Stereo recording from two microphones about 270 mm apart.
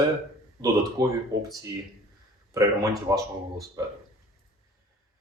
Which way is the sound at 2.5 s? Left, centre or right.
Centre.